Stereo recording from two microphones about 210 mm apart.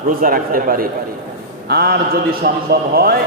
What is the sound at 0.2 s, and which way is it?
A man's voice, 45° right (ahead or behind).